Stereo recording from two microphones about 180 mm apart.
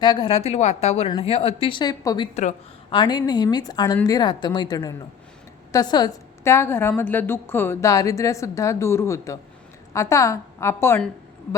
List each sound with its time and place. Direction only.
0.0 s a woman's voice: 25° left (ahead or behind)
2.3 s a woman's voice: 40° left (ahead or behind)
2.9 s a woman's voice: 25° left (ahead or behind)